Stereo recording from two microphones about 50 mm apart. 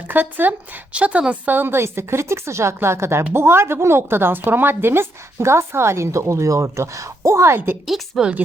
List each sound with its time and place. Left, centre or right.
0.1 s speech: right
0.9 s a woman's voice: right
1.5 s a woman's voice: right
7.9 s a woman's voice: centre